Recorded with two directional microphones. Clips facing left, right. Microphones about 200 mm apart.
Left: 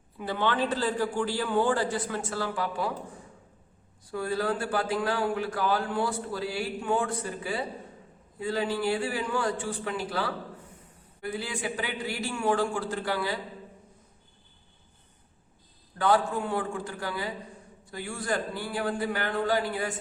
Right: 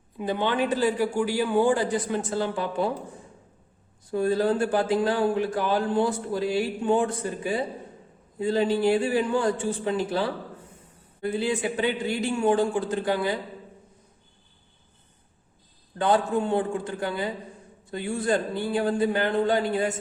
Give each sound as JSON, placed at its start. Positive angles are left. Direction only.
{"t": 0.2, "sound": "a man's voice", "side_deg": -15}
{"t": 4.1, "sound": "speech", "side_deg": -20}
{"t": 16.0, "sound": "speech", "side_deg": -20}